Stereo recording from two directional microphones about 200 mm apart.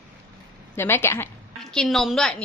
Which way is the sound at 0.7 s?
10° left (ahead or behind).